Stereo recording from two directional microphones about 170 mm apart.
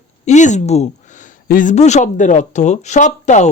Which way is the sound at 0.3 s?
45° left (ahead or behind).